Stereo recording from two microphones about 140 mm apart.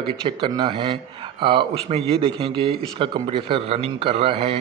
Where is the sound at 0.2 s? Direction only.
35° right (ahead or behind).